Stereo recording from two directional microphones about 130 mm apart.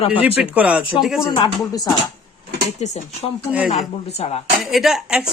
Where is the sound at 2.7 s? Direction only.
60° left (ahead or behind).